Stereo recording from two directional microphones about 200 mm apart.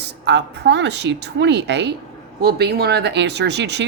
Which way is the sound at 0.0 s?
55° right (ahead or behind).